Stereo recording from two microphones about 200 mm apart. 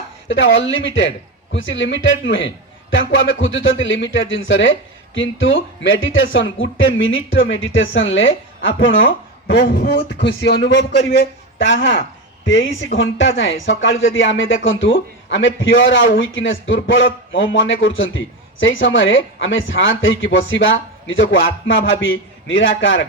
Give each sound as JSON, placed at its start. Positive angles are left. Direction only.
{"t": 0.3, "sound": "a man's voice", "side_deg": 70}